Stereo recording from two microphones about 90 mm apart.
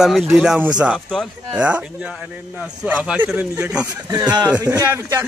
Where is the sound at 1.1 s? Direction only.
5° left (ahead or behind).